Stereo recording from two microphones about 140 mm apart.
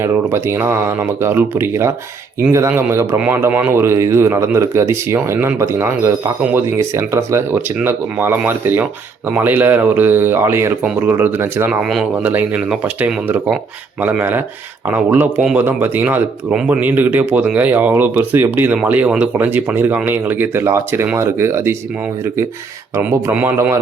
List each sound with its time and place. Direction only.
0.0 s speech: 15° right (ahead or behind)
23.0 s speech: 15° right (ahead or behind)